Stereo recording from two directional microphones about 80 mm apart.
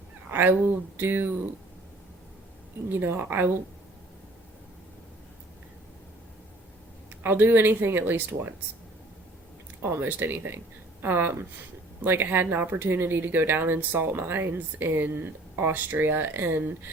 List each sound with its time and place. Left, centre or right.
0.3 s a sound: right
0.9 s speech: right
2.9 s speech: right
7.1 s speech: right
9.8 s speech: right